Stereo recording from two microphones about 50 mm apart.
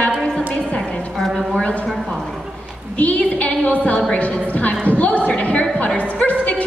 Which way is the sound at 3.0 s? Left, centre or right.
Left.